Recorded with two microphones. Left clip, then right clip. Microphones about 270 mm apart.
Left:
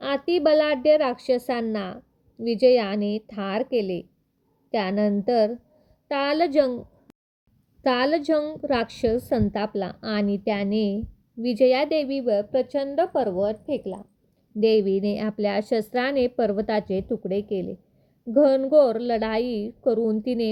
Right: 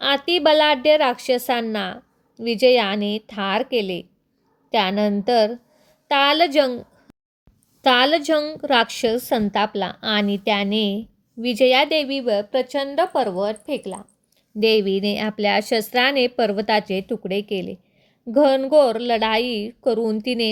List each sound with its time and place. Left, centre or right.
0.0 s a woman's voice: right
7.8 s a woman's voice: right